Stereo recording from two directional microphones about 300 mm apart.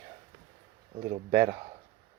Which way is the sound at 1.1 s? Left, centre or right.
Centre.